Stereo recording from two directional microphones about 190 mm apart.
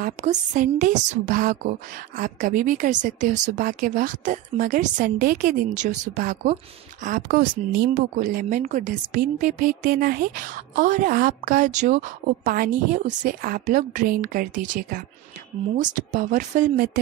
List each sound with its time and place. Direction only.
0.0 s a woman's voice: 40° right (ahead or behind)